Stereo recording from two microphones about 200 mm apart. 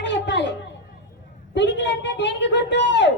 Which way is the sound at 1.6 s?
60° left (ahead or behind).